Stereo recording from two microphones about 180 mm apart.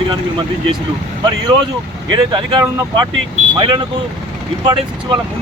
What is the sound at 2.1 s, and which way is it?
Speech, 25° right (ahead or behind).